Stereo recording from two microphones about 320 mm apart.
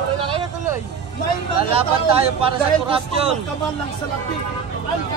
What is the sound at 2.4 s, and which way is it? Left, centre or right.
Speech, centre.